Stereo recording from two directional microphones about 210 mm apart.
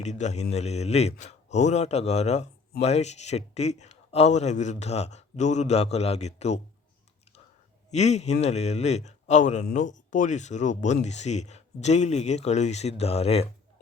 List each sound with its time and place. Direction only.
0.0 s a man's voice: 35° left (ahead or behind)
7.9 s a man's voice: 30° left (ahead or behind)